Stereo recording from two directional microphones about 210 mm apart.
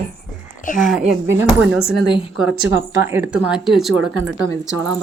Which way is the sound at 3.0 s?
10° right (ahead or behind).